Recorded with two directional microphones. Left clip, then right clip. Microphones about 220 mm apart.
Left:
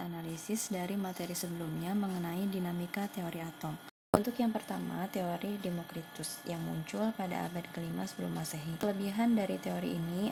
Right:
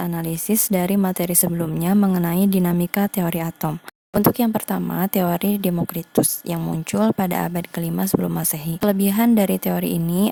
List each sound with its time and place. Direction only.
0.0 s speech: 40° right (ahead or behind)